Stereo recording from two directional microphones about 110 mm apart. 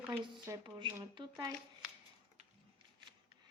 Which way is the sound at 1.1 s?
40° right (ahead or behind).